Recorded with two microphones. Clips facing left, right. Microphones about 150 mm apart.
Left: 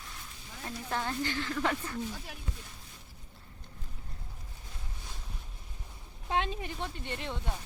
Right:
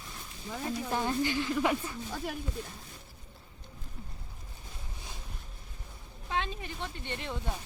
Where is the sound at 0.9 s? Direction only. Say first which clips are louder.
Right 2 dB; 15° right (ahead or behind).